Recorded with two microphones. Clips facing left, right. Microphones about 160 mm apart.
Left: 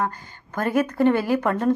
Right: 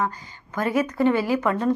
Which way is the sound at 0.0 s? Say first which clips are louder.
Even; 55° left (ahead or behind).